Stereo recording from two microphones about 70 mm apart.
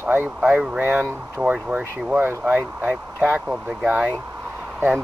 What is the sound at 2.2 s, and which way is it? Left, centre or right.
Speech, right.